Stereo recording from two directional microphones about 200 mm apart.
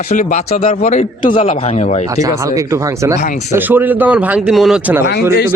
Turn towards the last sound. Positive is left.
turn(degrees=0)  # may be behind; listen again after turning